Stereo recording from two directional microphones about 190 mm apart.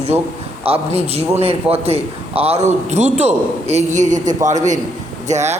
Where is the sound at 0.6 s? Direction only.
30° right (ahead or behind).